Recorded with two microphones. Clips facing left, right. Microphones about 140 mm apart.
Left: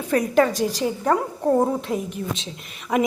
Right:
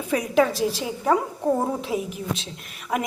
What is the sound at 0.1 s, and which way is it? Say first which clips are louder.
A woman's voice: left 2 dB; 5° right (ahead or behind).